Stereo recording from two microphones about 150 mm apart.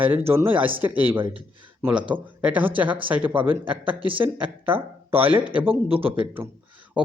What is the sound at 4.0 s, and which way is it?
Speech, 35° right (ahead or behind).